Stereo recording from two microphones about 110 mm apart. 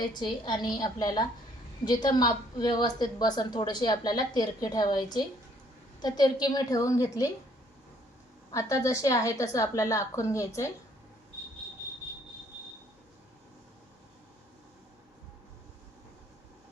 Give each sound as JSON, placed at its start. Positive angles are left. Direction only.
{"t": 0.0, "sound": "a woman's voice", "side_deg": 45}
{"t": 8.5, "sound": "a woman's voice", "side_deg": 30}